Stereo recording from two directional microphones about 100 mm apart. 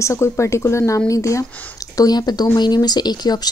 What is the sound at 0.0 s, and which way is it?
Speech, 30° left (ahead or behind).